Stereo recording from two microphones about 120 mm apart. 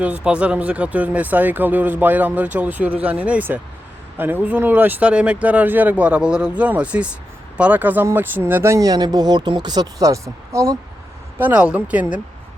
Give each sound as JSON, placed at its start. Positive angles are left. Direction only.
{"t": 0.0, "sound": "speech", "side_deg": -10}
{"t": 11.3, "sound": "speech", "side_deg": -10}